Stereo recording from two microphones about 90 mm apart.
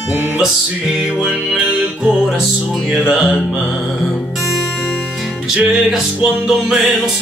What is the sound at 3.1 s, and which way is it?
Music, 5° right (ahead or behind).